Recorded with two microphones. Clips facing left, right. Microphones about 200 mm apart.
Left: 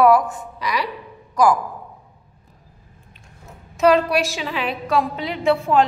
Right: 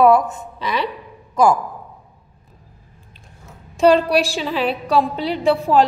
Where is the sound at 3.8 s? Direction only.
30° right (ahead or behind).